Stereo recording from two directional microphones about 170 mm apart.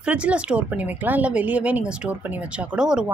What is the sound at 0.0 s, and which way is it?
A man's voice, 5° right (ahead or behind).